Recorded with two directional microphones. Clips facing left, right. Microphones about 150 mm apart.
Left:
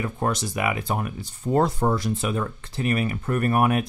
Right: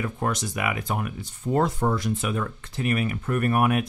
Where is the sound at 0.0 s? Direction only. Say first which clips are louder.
Left 2 dB; 30° left (ahead or behind).